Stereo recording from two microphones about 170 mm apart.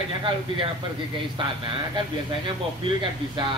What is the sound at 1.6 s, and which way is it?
Speech, 30° right (ahead or behind).